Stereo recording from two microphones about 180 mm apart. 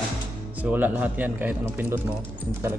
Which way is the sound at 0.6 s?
10° right (ahead or behind).